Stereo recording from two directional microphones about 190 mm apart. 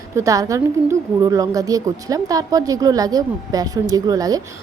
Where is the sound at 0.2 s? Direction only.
15° right (ahead or behind).